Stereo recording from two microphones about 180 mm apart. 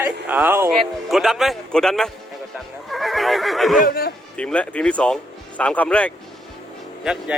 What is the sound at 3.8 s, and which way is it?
Speech, 55° left (ahead or behind).